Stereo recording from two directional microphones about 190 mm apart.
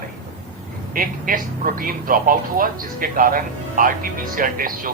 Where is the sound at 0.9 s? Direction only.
45° right (ahead or behind).